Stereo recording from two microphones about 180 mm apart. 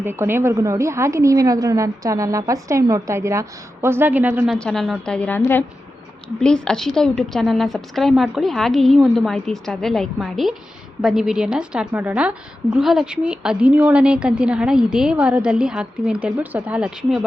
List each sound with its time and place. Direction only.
0.0 s a woman's voice: 10° right (ahead or behind)
4.5 s a woman's voice: 5° left (ahead or behind)